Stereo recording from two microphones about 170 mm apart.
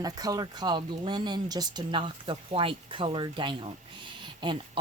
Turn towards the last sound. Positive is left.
turn(degrees=-30)  # may be behind; listen again after turning